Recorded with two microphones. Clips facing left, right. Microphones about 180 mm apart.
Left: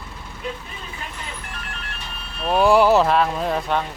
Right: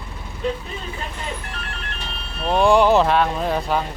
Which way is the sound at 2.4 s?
5° left (ahead or behind).